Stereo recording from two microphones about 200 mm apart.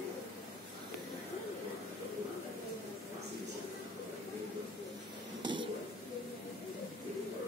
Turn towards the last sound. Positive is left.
turn(degrees=-25)  # may be behind; listen again after turning